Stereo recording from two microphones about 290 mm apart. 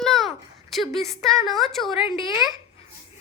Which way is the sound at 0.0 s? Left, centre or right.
Centre.